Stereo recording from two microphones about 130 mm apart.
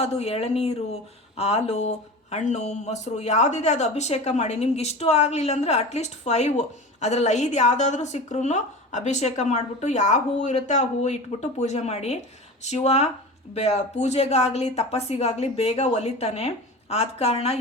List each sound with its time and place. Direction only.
0.0 s speech: 55° left (ahead or behind)